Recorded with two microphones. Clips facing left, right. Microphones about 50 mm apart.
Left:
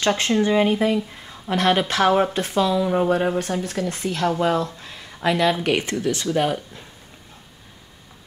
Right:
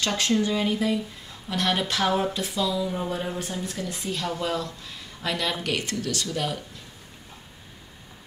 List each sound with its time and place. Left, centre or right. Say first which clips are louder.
0.0 s speech: left 5 dB; left
4.3 s speech: left 9 dB; left